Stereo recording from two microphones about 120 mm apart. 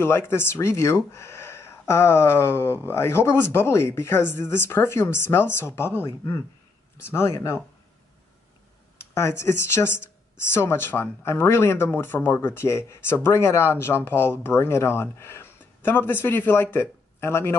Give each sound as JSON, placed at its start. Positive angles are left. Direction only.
{"t": 0.0, "sound": "speech", "side_deg": 20}
{"t": 9.1, "sound": "speech", "side_deg": 20}